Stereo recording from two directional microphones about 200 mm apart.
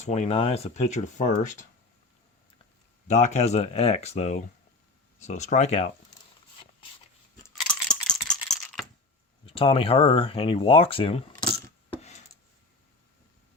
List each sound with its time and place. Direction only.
0.0 s speech: 35° left (ahead or behind)
3.1 s speech: 35° left (ahead or behind)
7.5 s a sound: centre (ahead or behind)
9.5 s speech: 25° left (ahead or behind)